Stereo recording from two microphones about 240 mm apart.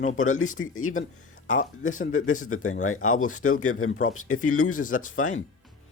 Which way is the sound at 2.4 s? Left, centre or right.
Left.